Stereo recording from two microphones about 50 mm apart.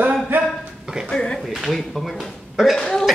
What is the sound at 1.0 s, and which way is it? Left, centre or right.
Speech, centre.